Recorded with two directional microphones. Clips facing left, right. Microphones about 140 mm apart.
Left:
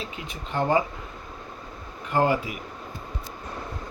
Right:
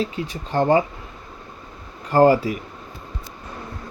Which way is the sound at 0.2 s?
35° right (ahead or behind).